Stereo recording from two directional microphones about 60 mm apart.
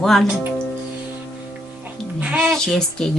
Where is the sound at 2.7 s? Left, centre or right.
Centre.